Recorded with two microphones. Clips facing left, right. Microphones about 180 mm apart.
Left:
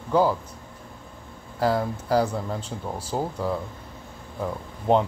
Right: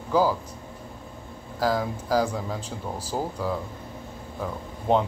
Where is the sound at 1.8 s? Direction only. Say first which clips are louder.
Left 1 dB; 10° right (ahead or behind).